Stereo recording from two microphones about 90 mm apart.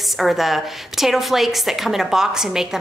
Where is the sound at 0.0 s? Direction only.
Centre (ahead or behind).